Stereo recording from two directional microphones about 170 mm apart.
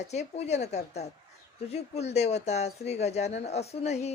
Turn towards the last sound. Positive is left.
turn(degrees=40)  # may be behind; listen again after turning